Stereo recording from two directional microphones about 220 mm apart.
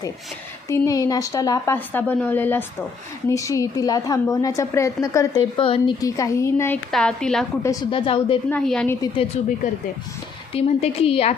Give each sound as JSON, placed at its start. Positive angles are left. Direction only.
{"t": 0.7, "sound": "a woman's voice", "side_deg": 15}
{"t": 5.5, "sound": "a woman's voice", "side_deg": 25}
{"t": 7.6, "sound": "a woman's voice", "side_deg": 15}
{"t": 8.4, "sound": "a woman's voice", "side_deg": 5}
{"t": 9.0, "sound": "a woman's voice", "side_deg": 25}
{"t": 10.5, "sound": "a woman's voice", "side_deg": 25}